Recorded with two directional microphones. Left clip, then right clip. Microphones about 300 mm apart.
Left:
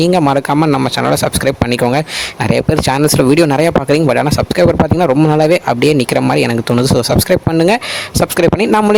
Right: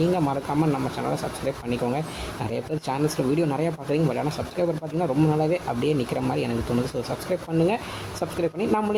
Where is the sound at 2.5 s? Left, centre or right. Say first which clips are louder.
Left 16 dB; left.